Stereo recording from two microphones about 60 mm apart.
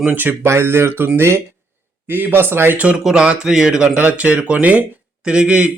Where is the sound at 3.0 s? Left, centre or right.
Centre.